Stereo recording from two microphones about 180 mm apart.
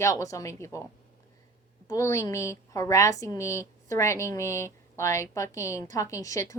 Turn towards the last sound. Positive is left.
turn(degrees=20)  # may be behind; listen again after turning